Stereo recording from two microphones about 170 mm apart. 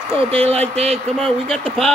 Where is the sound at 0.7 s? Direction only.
35° right (ahead or behind).